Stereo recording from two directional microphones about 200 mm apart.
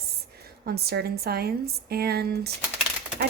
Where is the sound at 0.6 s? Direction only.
50° right (ahead or behind).